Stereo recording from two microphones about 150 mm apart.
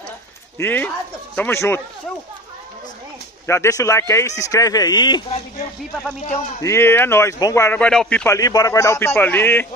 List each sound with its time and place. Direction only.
0.6 s a man's voice: 10° left (ahead or behind)
3.4 s speech: 20° left (ahead or behind)
6.3 s a man's voice: 15° left (ahead or behind)
7.8 s a man's voice: 5° left (ahead or behind)
8.3 s speech: 25° left (ahead or behind)